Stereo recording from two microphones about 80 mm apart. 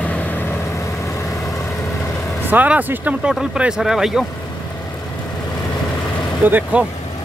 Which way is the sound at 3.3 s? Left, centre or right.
Centre.